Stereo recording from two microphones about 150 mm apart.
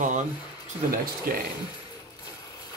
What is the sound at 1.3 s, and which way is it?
Speech, 70° right (ahead or behind).